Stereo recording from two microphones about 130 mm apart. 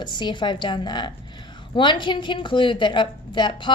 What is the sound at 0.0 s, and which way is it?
A woman's voice, 35° left (ahead or behind).